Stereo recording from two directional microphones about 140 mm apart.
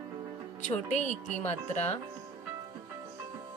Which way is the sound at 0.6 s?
60° left (ahead or behind).